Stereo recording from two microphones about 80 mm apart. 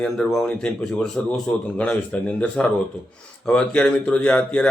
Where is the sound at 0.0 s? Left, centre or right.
Centre.